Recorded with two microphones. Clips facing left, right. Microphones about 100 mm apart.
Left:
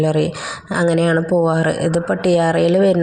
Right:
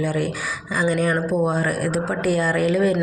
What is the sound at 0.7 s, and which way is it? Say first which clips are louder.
Speech: left 6 dB; 85° left.